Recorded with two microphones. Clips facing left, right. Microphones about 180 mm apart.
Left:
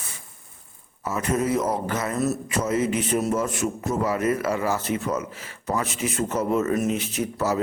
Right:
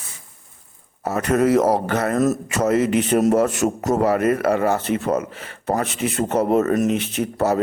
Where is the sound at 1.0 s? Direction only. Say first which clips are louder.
Right 6 dB; 65° right (ahead or behind).